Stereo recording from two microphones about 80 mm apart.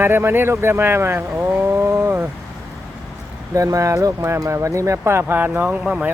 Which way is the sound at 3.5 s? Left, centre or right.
Right.